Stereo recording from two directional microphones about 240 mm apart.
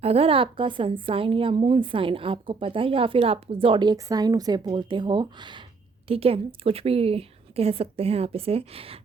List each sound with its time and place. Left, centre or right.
0.0 s speech: right